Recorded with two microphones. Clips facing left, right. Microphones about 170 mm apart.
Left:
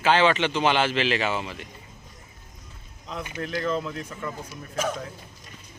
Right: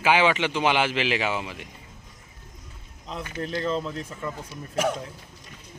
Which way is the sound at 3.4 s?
30° right (ahead or behind).